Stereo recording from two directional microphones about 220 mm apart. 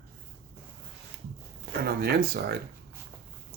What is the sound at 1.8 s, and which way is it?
Speech, 45° right (ahead or behind).